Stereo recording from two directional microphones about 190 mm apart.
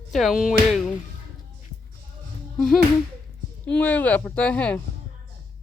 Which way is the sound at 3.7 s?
10° left (ahead or behind).